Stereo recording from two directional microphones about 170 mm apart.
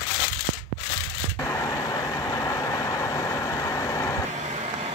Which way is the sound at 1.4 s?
20° left (ahead or behind).